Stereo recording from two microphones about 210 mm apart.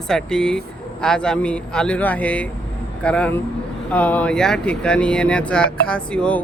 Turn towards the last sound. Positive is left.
turn(degrees=5)  # may be behind; listen again after turning